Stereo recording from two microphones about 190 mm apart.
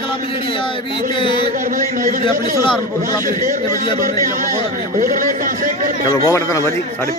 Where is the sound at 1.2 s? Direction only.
25° left (ahead or behind).